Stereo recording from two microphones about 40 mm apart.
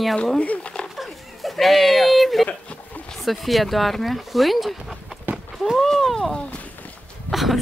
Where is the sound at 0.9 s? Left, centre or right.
Centre.